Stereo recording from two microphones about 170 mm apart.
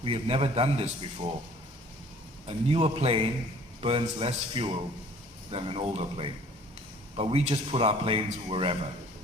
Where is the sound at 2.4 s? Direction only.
35° right (ahead or behind).